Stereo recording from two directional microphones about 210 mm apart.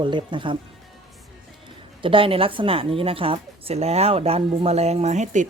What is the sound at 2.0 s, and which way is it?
A woman's voice, 25° right (ahead or behind).